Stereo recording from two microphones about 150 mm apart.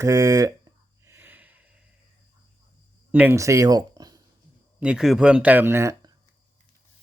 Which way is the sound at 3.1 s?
15° right (ahead or behind).